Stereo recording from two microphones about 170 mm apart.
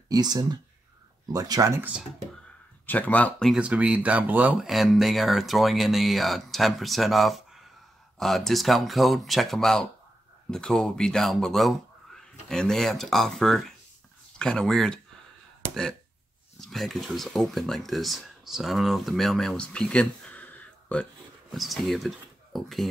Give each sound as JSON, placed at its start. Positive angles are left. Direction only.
{"t": 0.1, "sound": "speech", "side_deg": -25}
{"t": 2.9, "sound": "speech", "side_deg": 10}
{"t": 3.5, "sound": "speech", "side_deg": -5}